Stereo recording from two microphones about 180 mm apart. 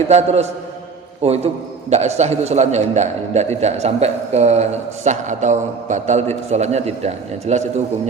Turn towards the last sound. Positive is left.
turn(degrees=-40)  # may be behind; listen again after turning